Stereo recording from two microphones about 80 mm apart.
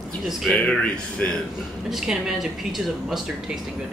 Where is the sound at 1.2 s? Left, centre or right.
Centre.